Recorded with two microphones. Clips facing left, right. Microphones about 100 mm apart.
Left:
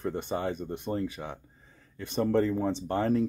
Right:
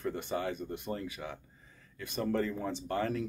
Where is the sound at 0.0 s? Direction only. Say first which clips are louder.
Left 3 dB; 25° left (ahead or behind).